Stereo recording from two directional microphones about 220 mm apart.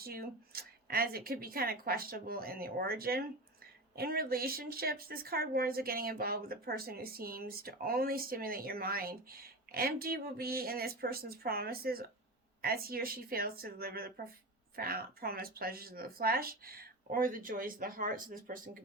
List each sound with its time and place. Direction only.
0.0 s speech: 45° right (ahead or behind)